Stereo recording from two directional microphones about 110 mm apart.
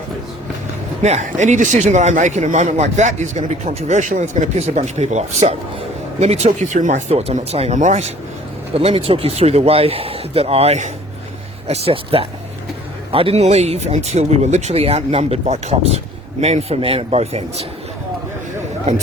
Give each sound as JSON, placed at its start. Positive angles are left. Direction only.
{"t": 1.0, "sound": "speech", "side_deg": -90}
{"t": 8.8, "sound": "speech", "side_deg": -65}
{"t": 11.7, "sound": "speech", "side_deg": -60}